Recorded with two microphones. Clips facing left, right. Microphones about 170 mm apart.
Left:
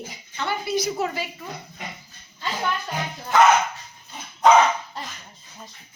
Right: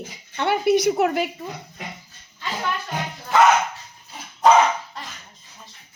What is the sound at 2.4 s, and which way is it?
Music, centre (ahead or behind).